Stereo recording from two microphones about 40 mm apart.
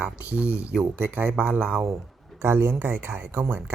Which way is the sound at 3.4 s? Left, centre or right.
Right.